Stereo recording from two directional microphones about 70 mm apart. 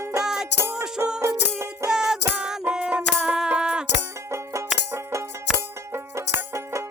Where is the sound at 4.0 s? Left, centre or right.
Right.